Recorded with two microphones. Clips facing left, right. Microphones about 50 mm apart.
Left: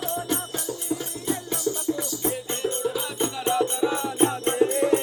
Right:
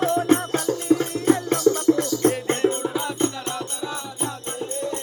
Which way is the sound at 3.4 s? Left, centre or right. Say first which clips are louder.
Left 7 dB; centre.